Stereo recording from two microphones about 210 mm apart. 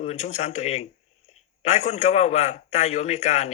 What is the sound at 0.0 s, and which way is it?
A man's voice, 30° left (ahead or behind).